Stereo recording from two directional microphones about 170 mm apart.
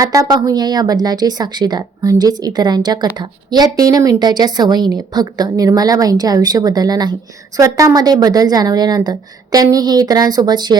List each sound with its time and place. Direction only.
0.0 s a woman's voice: 20° right (ahead or behind)